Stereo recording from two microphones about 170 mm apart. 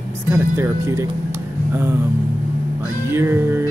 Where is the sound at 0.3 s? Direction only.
15° right (ahead or behind).